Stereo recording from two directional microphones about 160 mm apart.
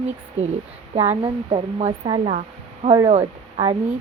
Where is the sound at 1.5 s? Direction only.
40° right (ahead or behind).